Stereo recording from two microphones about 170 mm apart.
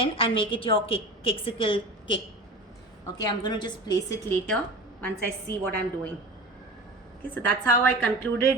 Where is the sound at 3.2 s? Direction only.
25° left (ahead or behind).